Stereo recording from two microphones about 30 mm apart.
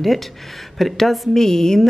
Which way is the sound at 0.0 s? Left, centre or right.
Centre.